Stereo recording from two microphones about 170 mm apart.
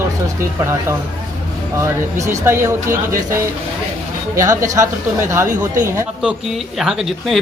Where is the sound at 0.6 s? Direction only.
15° right (ahead or behind).